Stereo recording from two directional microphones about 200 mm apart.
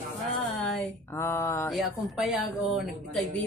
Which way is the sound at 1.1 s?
15° left (ahead or behind).